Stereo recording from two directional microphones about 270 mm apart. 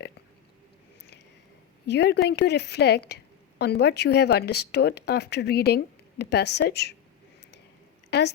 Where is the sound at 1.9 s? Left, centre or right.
Left.